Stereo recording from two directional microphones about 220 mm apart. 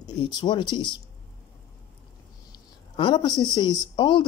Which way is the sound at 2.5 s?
20° left (ahead or behind).